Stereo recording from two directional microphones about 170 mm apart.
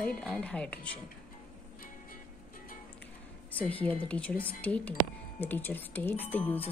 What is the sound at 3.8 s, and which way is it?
Speech, 10° left (ahead or behind).